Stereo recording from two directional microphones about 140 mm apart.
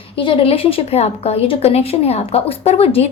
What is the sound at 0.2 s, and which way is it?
Speech, 35° left (ahead or behind).